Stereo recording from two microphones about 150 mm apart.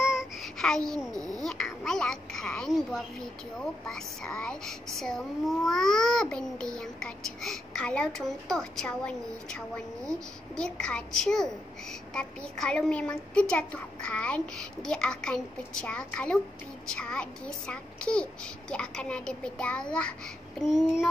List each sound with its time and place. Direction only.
0.1 s child singing: centre (ahead or behind)
1.1 s speech: 25° right (ahead or behind)
1.4 s a woman's voice: 5° left (ahead or behind)